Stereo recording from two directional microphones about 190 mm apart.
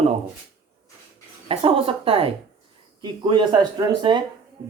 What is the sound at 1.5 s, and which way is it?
Speech, 30° right (ahead or behind).